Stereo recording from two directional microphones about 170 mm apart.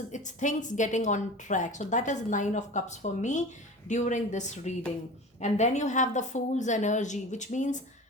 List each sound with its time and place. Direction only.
0.1 s a woman's voice: 45° left (ahead or behind)